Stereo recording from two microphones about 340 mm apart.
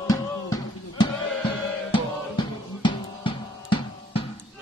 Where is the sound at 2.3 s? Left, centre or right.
Centre.